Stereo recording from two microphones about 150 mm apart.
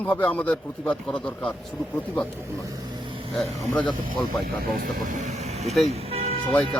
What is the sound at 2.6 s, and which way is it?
Vehicle, 25° right (ahead or behind).